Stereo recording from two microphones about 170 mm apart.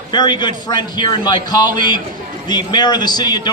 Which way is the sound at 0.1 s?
25° left (ahead or behind).